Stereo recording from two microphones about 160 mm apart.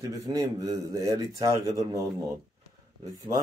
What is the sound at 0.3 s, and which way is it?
A man's voice, 20° right (ahead or behind).